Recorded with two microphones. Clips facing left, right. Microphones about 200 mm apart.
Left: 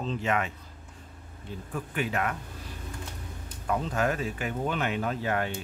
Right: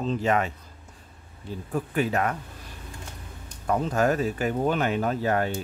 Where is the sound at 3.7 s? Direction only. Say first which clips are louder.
Right 5 dB; 40° right (ahead or behind).